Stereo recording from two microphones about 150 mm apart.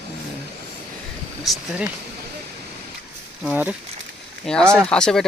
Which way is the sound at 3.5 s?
10° right (ahead or behind).